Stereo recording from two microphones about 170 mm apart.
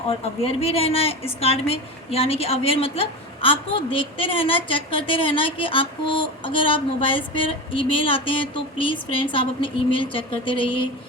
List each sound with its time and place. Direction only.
0.4 s a woman's voice: 35° left (ahead or behind)